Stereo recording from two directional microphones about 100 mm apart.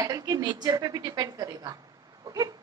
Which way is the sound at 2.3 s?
35° right (ahead or behind).